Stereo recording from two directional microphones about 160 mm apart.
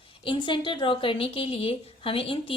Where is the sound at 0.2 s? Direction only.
30° left (ahead or behind).